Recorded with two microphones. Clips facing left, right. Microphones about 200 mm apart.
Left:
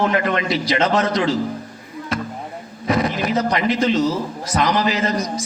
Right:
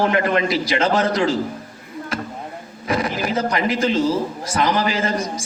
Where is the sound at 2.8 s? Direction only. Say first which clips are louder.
Left 2 dB; 30° right (ahead or behind).